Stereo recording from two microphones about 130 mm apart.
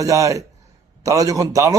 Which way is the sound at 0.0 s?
25° right (ahead or behind).